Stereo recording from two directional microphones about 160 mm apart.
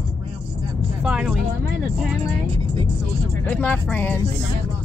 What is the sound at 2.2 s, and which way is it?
Speech, 40° right (ahead or behind).